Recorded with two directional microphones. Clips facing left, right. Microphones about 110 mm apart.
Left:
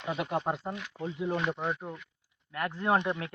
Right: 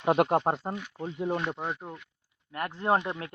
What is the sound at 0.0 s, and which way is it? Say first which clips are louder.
Speech: right 8 dB; 55° right (ahead or behind).